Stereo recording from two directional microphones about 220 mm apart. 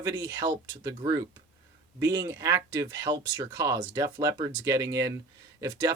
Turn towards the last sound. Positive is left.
turn(degrees=-15)  # may be behind; listen again after turning